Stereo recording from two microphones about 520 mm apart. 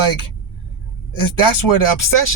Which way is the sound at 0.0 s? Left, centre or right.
Left.